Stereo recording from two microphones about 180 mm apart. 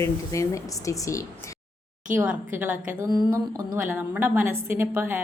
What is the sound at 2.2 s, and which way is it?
A woman's voice, 10° right (ahead or behind).